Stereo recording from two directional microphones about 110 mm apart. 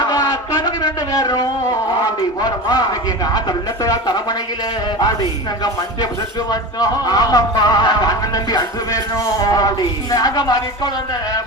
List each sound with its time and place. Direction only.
0.0 s a sound: 35° left (ahead or behind)
2.4 s speech: 35° left (ahead or behind)
3.8 s speech: 35° left (ahead or behind)
6.5 s speech: 35° left (ahead or behind)